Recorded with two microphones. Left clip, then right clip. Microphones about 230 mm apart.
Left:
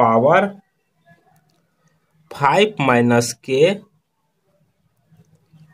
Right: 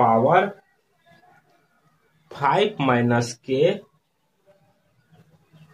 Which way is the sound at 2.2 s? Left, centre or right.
Left.